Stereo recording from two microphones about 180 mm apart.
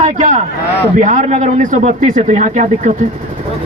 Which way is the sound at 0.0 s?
40° right (ahead or behind).